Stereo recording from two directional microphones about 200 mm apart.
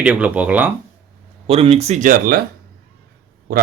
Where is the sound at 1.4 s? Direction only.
30° right (ahead or behind); by 2.4 s 45° right (ahead or behind).